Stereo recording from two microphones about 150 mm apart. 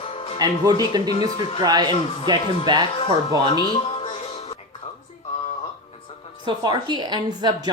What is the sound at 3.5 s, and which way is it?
Music, 30° left (ahead or behind).